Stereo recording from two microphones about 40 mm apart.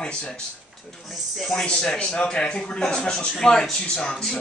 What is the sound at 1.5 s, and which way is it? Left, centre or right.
Speech, centre.